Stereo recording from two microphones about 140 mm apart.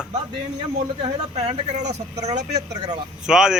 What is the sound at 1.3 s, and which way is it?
Speech, 50° right (ahead or behind).